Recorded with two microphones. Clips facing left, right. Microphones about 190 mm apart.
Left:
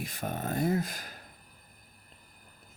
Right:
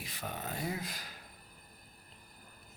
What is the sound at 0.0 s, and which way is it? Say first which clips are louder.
Speech: left 7 dB; 50° left (ahead or behind).